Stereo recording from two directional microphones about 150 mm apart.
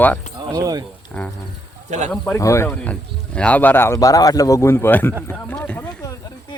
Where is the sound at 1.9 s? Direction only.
50° right (ahead or behind).